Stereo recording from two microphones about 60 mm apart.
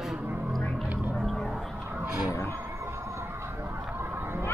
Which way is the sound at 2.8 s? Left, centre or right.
Right.